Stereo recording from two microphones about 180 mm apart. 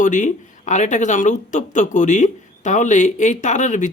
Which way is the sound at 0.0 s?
45° left (ahead or behind).